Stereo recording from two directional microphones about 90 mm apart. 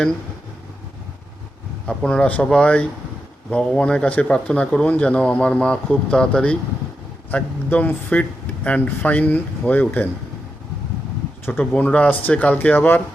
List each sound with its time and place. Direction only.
1.9 s speech: 10° left (ahead or behind)
11.6 s speech: 10° left (ahead or behind)